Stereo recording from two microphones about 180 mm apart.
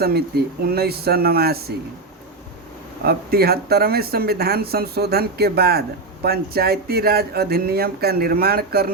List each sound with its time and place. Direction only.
0.0 s speech: 60° right (ahead or behind)
3.1 s speech: 60° right (ahead or behind)